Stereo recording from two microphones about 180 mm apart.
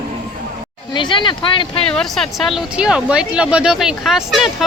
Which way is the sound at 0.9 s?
25° left (ahead or behind).